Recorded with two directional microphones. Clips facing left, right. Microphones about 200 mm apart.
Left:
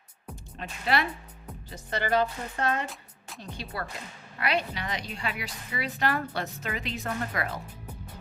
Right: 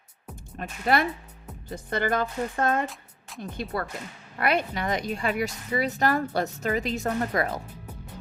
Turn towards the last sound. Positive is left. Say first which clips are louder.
# right 6 dB
turn(degrees=-40)  # may be behind; listen again after turning